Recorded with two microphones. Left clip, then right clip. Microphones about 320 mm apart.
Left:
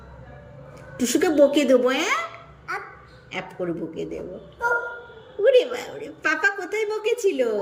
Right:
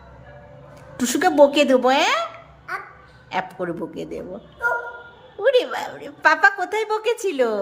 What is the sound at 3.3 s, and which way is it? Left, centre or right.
A woman's voice, centre.